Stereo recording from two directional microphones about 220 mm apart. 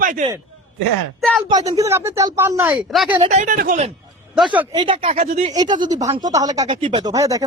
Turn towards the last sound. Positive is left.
turn(degrees=-15)  # may be behind; listen again after turning